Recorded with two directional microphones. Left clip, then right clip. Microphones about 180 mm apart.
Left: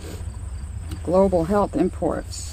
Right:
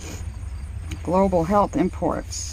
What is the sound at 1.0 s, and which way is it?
Speech, 25° right (ahead or behind).